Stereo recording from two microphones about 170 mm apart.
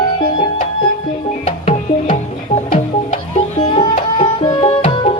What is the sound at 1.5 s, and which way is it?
Music, 35° left (ahead or behind).